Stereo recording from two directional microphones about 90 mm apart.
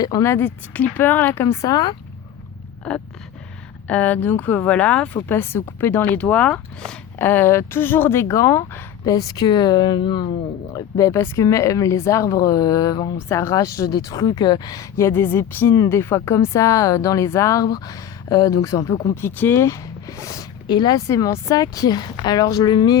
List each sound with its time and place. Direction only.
0.0 s a woman's voice: 45° left (ahead or behind)
0.3 s speech: 20° left (ahead or behind)
1.6 s a woman's voice: 50° left (ahead or behind)
2.9 s a sound: 10° left (ahead or behind)
3.8 s speech: 15° left (ahead or behind)
7.2 s a woman's voice: 25° left (ahead or behind); by 10.2 s 55° left (ahead or behind)
10.8 s speech: 35° left (ahead or behind)
13.2 s speech: 30° left (ahead or behind)
14.9 s speech: 30° left (ahead or behind)
19.1 s speech: 20° left (ahead or behind)
19.6 s speech: 35° left (ahead or behind)
20.7 s a woman's voice: 50° left (ahead or behind)
21.2 s a woman's voice: 35° left (ahead or behind); by 23.0 s 55° left (ahead or behind)